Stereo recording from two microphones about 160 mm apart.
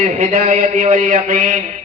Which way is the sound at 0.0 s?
50° right (ahead or behind).